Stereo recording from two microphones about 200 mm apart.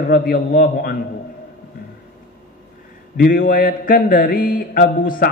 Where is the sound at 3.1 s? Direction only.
45° left (ahead or behind).